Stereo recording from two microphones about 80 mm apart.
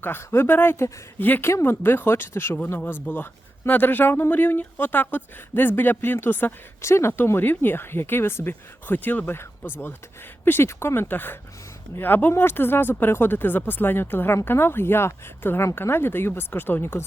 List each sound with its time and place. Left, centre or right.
0.0 s speech: left
10.4 s speech: left